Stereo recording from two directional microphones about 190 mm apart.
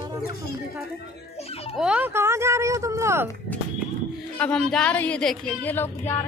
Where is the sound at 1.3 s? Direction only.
30° left (ahead or behind).